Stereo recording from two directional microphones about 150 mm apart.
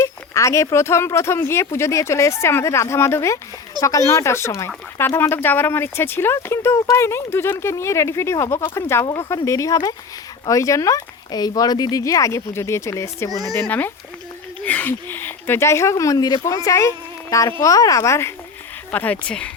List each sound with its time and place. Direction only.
0.0 s speech: 20° left (ahead or behind)